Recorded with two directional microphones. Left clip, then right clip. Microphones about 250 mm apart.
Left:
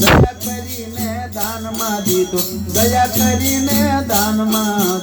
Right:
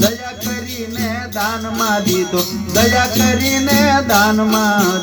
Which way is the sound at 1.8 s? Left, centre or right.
Right.